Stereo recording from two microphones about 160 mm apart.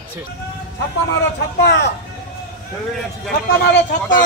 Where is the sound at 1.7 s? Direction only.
90° left.